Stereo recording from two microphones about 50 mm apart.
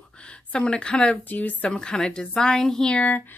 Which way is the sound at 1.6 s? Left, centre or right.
Centre.